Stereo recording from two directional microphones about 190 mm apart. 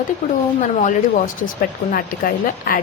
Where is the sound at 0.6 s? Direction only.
40° left (ahead or behind).